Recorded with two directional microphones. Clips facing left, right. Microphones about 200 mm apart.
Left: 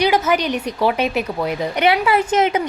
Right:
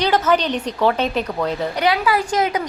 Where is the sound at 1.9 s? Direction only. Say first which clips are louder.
Left 3 dB; 25° left (ahead or behind).